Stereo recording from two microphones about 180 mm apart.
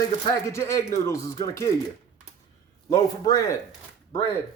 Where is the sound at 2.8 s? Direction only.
20° left (ahead or behind).